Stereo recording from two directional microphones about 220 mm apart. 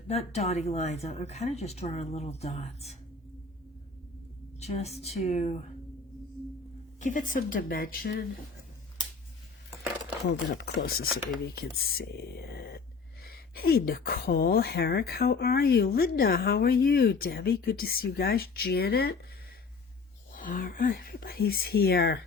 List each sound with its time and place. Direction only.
0.1 s speech: 30° left (ahead or behind)
4.6 s a woman's voice: 30° left (ahead or behind)
7.0 s a woman's voice: 35° left (ahead or behind)
10.5 s a woman's voice: 45° left (ahead or behind)
20.3 s a woman's voice: 40° left (ahead or behind)